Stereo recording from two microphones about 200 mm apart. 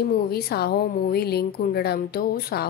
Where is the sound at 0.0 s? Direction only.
50° left (ahead or behind).